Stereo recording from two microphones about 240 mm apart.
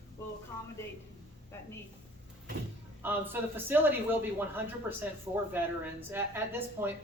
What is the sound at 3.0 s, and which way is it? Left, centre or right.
Speech, centre.